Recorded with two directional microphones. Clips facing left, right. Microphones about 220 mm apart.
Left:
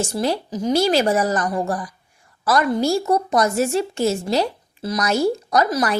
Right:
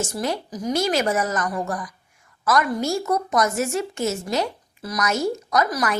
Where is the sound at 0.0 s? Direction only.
30° left (ahead or behind).